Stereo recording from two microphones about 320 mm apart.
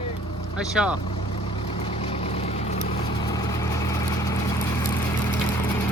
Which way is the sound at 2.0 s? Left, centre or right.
Centre.